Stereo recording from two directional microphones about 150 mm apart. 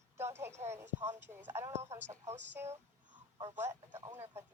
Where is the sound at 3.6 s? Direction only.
20° right (ahead or behind).